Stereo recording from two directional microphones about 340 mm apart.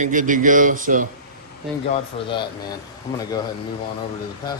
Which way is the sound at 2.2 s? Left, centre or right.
Centre.